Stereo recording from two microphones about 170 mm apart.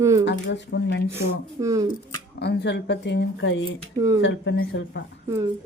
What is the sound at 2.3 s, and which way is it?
A woman's voice, 75° left (ahead or behind).